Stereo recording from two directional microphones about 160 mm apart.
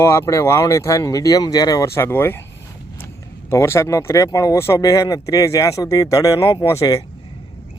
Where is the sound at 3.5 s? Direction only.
15° left (ahead or behind).